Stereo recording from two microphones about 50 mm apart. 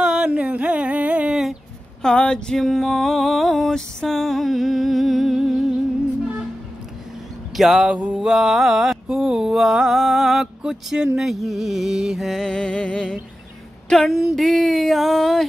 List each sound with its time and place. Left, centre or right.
0.0 s a sound: centre
1.3 s a sound: centre
2.0 s music: centre
2.6 s female singing: centre
3.7 s a sound: centre
7.5 s music: centre
7.9 s mantra: right
8.2 s female singing: centre
9.1 s a sound: centre
9.8 s music: centre
11.1 s female singing: centre
12.3 s music: centre
14.0 s female singing: centre